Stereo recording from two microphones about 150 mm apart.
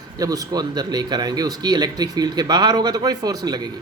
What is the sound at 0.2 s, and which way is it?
Speech, 25° right (ahead or behind).